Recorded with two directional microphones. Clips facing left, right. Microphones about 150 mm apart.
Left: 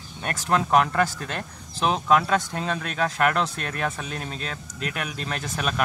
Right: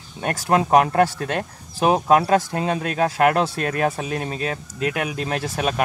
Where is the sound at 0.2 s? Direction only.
45° right (ahead or behind).